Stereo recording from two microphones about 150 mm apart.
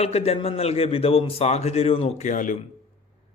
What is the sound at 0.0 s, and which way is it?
A man's voice, 45° left (ahead or behind).